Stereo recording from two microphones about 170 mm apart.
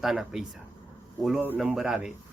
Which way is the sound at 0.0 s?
Centre (ahead or behind).